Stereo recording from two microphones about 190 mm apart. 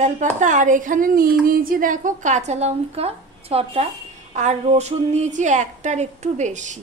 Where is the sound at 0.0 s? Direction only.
40° right (ahead or behind).